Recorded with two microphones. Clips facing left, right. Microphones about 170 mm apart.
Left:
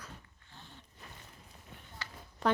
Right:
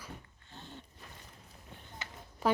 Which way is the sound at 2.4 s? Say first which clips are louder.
Right 1 dB; 5° right (ahead or behind).